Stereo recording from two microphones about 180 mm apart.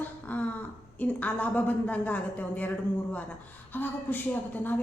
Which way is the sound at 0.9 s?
10° left (ahead or behind).